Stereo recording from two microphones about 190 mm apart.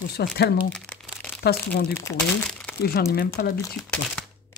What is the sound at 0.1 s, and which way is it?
Speech, 55° left (ahead or behind).